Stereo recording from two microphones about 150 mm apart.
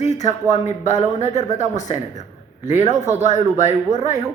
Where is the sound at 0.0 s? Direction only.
50° left (ahead or behind).